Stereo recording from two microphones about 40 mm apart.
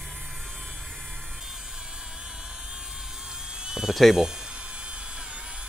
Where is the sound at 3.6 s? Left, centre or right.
Centre.